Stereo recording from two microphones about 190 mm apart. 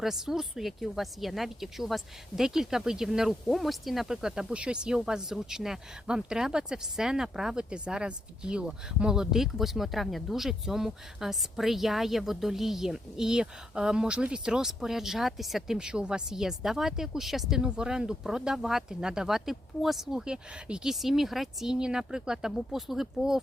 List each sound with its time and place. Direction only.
0.0 s speech: centre (ahead or behind)